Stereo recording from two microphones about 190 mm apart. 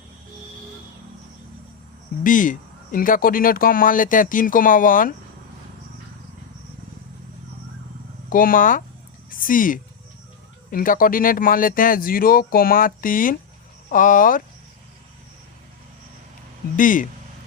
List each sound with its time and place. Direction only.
2.2 s speech: 45° left (ahead or behind)
8.3 s speech: 45° left (ahead or behind)
16.7 s speech: 45° left (ahead or behind)